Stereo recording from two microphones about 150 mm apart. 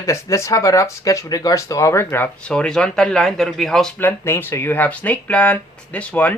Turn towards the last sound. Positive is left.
turn(degrees=10)  # may be behind; listen again after turning